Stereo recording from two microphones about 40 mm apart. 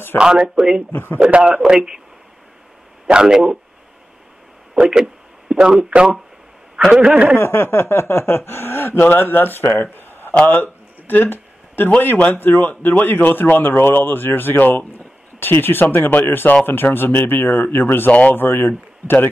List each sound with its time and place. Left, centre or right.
0.2 s speech: centre
0.9 s speech: left
1.3 s speech: right
3.1 s speech: centre
4.8 s speech: centre; by 7.2 s right
7.3 s speech: left
9.0 s a man's voice: left
10.4 s a sound: left
12.3 s speech: left